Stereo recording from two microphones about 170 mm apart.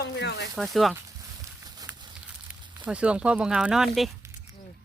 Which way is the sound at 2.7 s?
5° right (ahead or behind).